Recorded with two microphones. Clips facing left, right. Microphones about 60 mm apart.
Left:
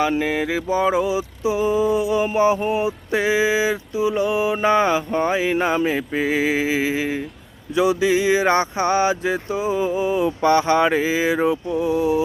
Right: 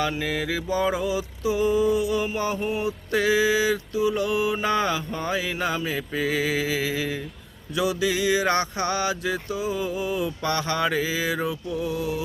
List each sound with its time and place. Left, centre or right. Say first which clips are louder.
0.0 s mantra: left 6 dB; left